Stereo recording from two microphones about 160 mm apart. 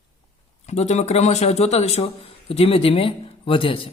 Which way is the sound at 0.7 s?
45° left (ahead or behind).